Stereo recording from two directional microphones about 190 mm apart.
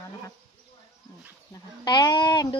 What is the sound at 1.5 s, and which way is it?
Speech, 20° left (ahead or behind).